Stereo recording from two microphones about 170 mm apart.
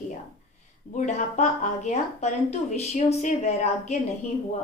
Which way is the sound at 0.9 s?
45° left (ahead or behind).